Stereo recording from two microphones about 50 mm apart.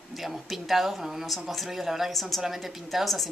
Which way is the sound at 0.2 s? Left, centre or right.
Centre.